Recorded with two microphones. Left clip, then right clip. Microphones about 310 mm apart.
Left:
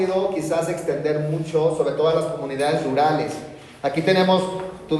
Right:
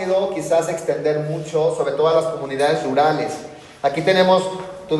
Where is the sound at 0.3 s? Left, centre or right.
Right.